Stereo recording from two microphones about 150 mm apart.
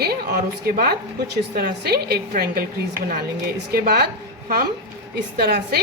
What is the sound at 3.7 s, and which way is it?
Speech, 90° right.